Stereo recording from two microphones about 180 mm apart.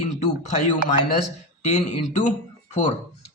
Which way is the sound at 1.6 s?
40° left (ahead or behind).